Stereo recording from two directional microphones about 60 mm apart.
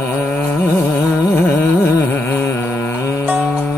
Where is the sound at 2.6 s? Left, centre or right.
Left.